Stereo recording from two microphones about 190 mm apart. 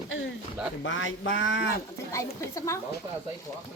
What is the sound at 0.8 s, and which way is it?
Speech, 80° left.